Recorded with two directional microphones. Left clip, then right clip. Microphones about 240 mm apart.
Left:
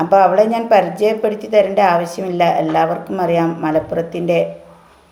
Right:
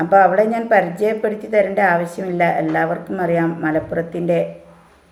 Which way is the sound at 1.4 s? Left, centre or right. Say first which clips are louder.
Left 3 dB; centre.